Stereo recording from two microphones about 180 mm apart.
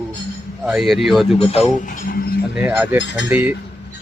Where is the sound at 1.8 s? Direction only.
50° left (ahead or behind).